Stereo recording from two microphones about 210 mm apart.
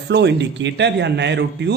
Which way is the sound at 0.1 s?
55° right (ahead or behind).